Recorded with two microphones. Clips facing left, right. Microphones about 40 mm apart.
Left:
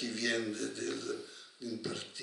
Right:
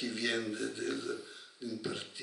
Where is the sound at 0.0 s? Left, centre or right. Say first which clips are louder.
Even; centre.